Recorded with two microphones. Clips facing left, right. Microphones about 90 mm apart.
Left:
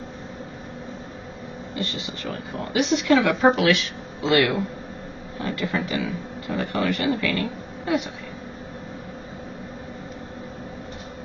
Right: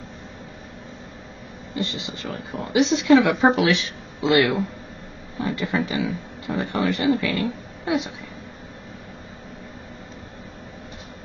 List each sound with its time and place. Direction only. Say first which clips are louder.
1.8 s a man's voice: right 2 dB; 20° right (ahead or behind)